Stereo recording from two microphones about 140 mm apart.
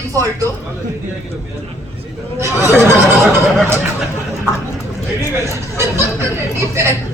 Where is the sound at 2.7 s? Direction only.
15° right (ahead or behind).